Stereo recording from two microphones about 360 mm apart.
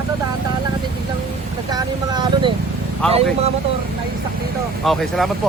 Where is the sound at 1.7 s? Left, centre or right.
Centre.